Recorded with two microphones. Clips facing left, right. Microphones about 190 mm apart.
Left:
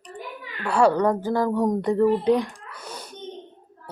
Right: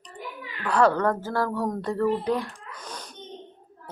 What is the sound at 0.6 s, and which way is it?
Speech, 10° left (ahead or behind).